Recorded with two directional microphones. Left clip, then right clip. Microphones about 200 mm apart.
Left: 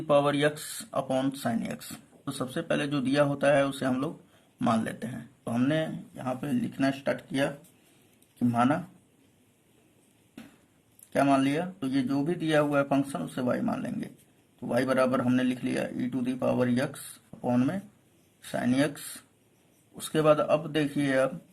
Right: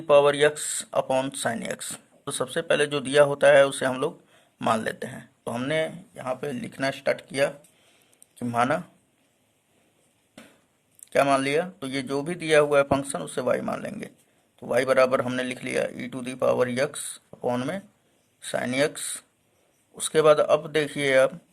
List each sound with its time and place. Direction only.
0.1 s speech: 35° right (ahead or behind)
11.1 s a man's voice: 40° right (ahead or behind)